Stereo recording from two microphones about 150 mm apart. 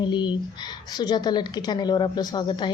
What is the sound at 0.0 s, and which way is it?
A woman's voice, 30° left (ahead or behind).